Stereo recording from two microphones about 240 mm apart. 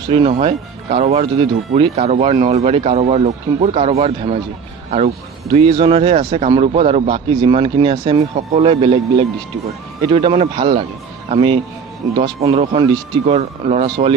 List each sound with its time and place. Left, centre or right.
0.1 s speech: right
10.0 s speech: right